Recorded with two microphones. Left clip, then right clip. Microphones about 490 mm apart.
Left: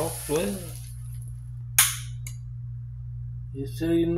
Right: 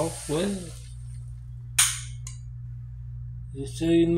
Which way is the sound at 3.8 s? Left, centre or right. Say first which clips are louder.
Right 3 dB; left.